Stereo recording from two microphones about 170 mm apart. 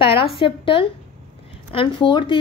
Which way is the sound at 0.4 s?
30° left (ahead or behind).